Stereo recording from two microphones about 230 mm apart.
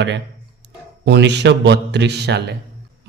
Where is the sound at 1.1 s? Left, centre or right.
Right.